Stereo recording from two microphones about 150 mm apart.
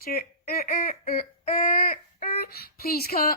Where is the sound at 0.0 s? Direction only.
80° left.